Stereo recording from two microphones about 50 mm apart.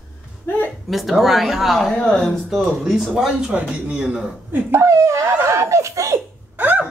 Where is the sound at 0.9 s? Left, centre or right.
Centre.